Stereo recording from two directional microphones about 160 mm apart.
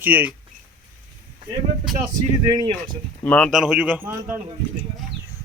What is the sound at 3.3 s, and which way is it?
Speech, 5° left (ahead or behind).